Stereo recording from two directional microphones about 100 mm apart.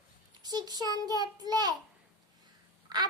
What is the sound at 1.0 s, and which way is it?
Child singing, 40° right (ahead or behind).